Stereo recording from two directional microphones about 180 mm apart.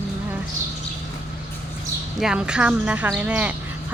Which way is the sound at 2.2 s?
5° right (ahead or behind).